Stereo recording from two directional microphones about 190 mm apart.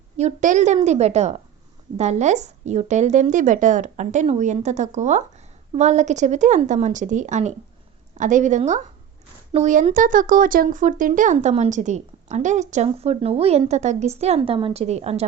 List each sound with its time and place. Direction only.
0.2 s speech: 40° right (ahead or behind)